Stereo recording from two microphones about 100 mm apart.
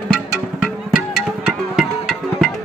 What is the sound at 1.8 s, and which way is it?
Music, 5° right (ahead or behind).